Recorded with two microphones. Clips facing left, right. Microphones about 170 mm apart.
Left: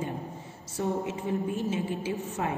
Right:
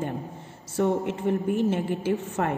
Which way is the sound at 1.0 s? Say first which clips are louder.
Right 5 dB; 60° right (ahead or behind).